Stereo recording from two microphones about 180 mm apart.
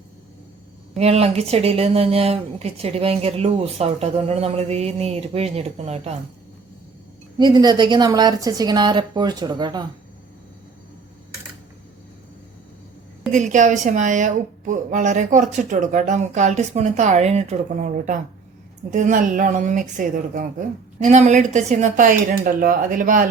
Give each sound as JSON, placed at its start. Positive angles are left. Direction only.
{"t": 0.9, "sound": "speech", "side_deg": -35}
{"t": 7.3, "sound": "a woman's voice", "side_deg": -20}
{"t": 13.3, "sound": "a woman's voice", "side_deg": -45}